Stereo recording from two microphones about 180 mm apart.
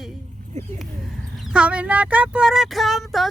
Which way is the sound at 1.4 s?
5° right (ahead or behind).